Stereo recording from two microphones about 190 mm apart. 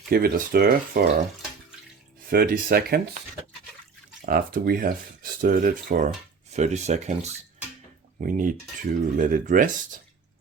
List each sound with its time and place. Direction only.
0.1 s speech: 50° right (ahead or behind)
2.3 s speech: 50° right (ahead or behind)
4.3 s speech: 50° right (ahead or behind)